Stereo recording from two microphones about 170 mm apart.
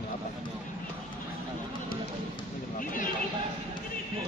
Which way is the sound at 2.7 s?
55° left (ahead or behind).